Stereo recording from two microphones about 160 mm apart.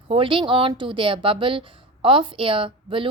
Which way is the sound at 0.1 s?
35° right (ahead or behind).